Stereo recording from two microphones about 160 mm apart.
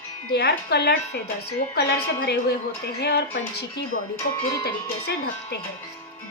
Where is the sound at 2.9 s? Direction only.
85° left.